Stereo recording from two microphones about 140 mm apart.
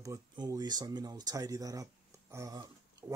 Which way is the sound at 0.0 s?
25° right (ahead or behind).